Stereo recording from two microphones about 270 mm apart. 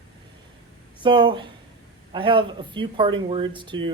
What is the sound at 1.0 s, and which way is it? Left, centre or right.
Speech, centre.